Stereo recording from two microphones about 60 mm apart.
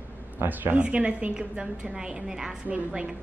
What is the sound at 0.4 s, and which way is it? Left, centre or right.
Speech, right.